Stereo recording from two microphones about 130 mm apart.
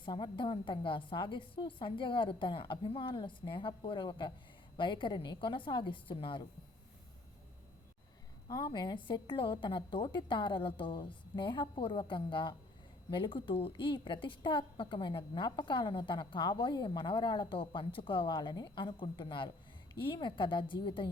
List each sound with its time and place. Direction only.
0.0 s a woman's voice: 35° left (ahead or behind)
8.4 s a woman's voice: 35° left (ahead or behind)